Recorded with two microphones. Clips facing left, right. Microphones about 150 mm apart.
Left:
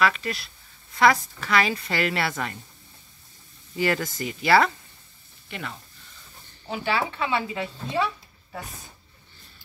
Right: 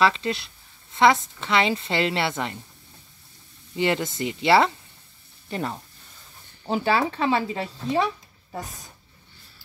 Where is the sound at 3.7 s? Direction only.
25° right (ahead or behind).